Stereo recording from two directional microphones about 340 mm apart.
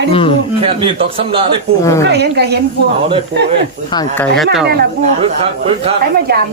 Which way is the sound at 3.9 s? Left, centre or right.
Centre.